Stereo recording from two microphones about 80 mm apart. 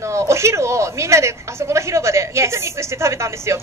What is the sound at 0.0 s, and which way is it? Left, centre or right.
A woman's voice, right.